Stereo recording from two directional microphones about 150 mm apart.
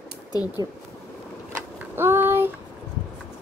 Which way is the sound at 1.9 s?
15° right (ahead or behind).